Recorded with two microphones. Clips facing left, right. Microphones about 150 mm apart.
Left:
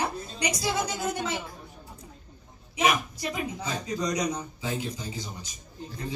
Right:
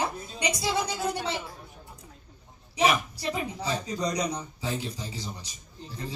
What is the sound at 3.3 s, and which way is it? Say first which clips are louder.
Speech: right 3 dB; 35° right (ahead or behind).